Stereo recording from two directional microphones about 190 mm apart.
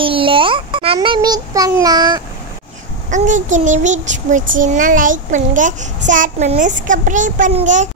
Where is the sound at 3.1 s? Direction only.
40° right (ahead or behind).